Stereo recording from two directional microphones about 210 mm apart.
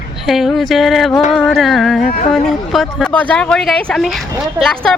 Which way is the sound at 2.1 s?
40° left (ahead or behind).